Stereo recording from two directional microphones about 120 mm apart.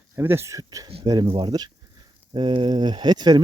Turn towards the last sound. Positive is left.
turn(degrees=-40)  # may be behind; listen again after turning